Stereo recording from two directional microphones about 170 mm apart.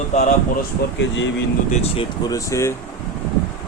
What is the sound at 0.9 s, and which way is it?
Speech, 90° left.